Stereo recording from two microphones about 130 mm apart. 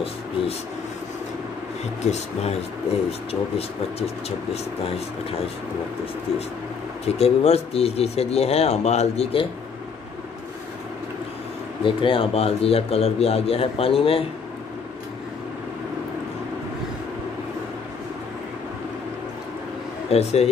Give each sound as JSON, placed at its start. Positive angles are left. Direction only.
{"t": 2.0, "sound": "a man's voice", "side_deg": 60}
{"t": 7.2, "sound": "a man's voice", "side_deg": 50}
{"t": 11.8, "sound": "a man's voice", "side_deg": 40}
{"t": 20.1, "sound": "speech", "side_deg": 55}